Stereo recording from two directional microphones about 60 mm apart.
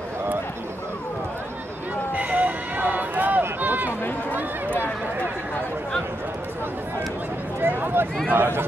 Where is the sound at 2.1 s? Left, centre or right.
Right.